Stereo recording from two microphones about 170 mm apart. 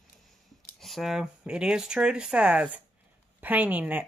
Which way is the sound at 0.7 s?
Centre (ahead or behind).